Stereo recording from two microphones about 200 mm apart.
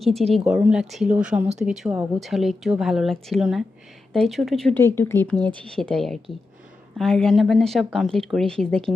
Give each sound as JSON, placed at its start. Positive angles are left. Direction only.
{"t": 0.0, "sound": "speech", "side_deg": 0}
{"t": 4.8, "sound": "speech", "side_deg": 15}
{"t": 5.4, "sound": "speech", "side_deg": -25}
{"t": 5.7, "sound": "speech", "side_deg": 0}